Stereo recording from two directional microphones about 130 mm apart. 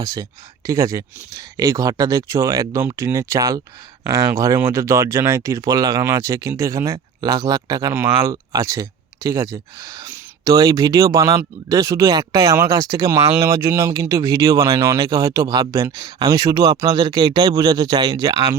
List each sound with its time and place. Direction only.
0.0 s speech: 30° right (ahead or behind)